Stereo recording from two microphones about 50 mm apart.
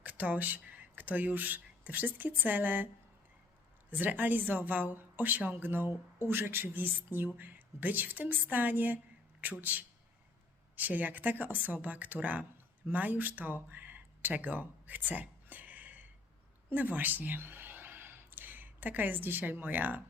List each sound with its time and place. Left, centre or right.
0.0 s speech: right